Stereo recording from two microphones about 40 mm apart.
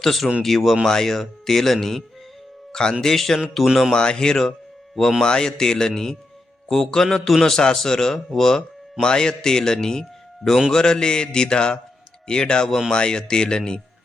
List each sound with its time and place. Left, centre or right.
0.0 s speech: centre
3.9 s speech: centre
10.7 s mantra: centre